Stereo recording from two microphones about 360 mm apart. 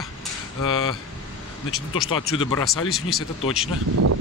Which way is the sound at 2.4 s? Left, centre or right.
Centre.